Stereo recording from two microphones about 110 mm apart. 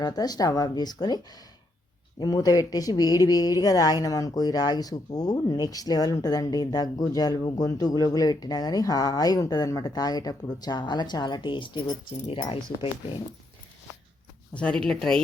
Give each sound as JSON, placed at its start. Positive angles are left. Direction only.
{"t": 0.0, "sound": "speech", "side_deg": 35}
{"t": 14.5, "sound": "speech", "side_deg": 10}